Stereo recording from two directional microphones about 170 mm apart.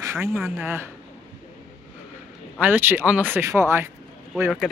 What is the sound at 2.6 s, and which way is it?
Speech, 10° right (ahead or behind).